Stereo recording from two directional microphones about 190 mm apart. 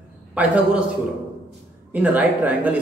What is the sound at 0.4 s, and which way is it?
Speech, 5° right (ahead or behind).